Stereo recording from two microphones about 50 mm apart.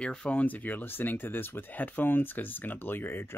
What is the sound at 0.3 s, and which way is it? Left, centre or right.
Speech, left.